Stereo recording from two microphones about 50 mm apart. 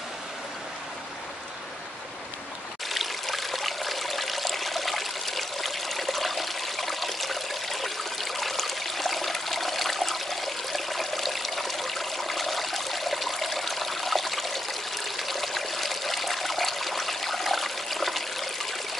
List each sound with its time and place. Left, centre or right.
2.9 s trickle: centre